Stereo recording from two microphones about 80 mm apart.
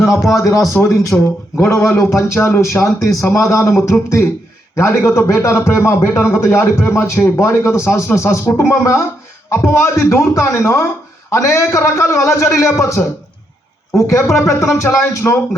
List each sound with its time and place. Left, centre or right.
0.0 s a man's voice: left